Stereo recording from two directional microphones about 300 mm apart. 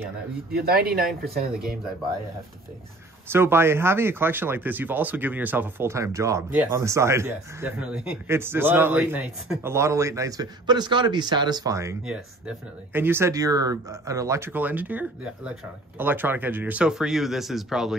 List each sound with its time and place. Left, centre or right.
0.5 s speech: right
3.3 s speech: centre